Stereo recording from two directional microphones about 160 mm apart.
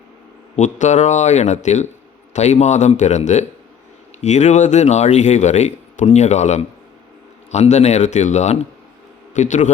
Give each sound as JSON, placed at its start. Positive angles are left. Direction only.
{"t": 0.5, "sound": "a man's voice", "side_deg": 50}